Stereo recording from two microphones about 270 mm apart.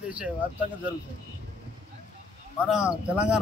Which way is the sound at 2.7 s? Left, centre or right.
Centre.